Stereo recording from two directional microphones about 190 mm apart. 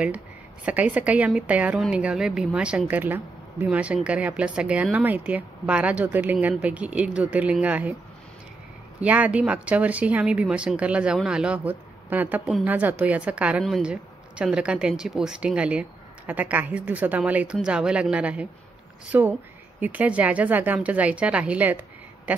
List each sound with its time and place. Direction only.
0.7 s speech: 5° right (ahead or behind)
9.0 s speech: 5° right (ahead or behind)